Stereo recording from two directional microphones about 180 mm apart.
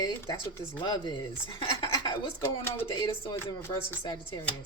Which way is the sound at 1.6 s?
25° left (ahead or behind).